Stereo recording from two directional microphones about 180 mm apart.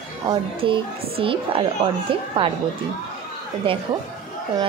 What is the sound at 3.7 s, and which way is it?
Speech, 30° right (ahead or behind).